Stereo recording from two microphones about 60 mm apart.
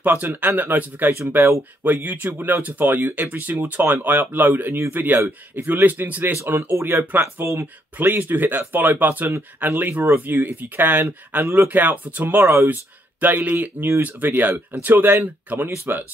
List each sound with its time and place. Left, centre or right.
0.0 s speech: right
1.3 s speech: right
6.5 s speech: right
7.0 s speech: right
7.4 s speech: right